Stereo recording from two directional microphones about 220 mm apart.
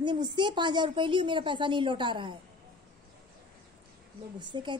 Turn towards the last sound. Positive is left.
turn(degrees=-20)  # may be behind; listen again after turning